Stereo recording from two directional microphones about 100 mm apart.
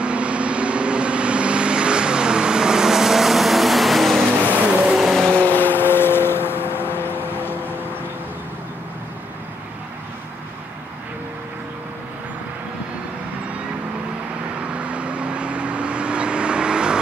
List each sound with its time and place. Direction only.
0.0 s vehicle: 10° right (ahead or behind)
4.5 s vehicle: 15° right (ahead or behind)
4.9 s vehicle: centre (ahead or behind)
5.3 s vehicle: 20° left (ahead or behind)
14.7 s vehicle: 10° right (ahead or behind)